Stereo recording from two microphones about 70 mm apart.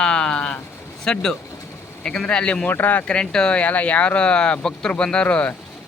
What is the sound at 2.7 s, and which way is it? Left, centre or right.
Speech, left.